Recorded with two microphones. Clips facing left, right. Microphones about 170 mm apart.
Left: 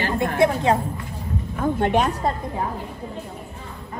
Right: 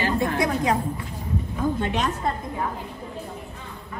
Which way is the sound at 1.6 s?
55° left (ahead or behind).